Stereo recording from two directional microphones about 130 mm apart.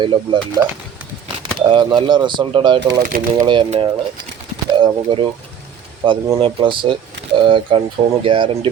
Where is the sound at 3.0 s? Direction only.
90° right.